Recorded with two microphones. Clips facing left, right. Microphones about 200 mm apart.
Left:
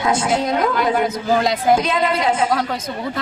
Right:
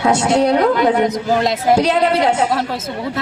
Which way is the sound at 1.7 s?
75° right (ahead or behind).